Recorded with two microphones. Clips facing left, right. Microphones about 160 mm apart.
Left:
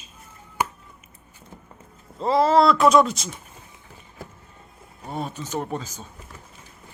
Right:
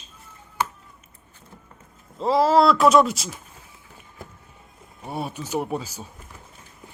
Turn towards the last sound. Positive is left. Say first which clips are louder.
# right 2 dB
turn(degrees=-10)  # may be behind; listen again after turning